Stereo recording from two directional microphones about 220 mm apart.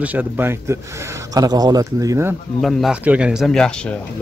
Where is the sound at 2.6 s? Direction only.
Centre (ahead or behind).